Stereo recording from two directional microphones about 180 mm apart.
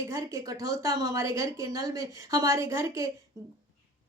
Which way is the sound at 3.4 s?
20° left (ahead or behind).